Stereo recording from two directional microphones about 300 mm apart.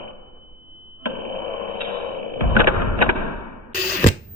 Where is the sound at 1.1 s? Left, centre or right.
Right.